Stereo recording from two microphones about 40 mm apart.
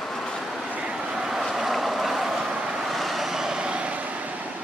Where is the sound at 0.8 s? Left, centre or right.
Centre.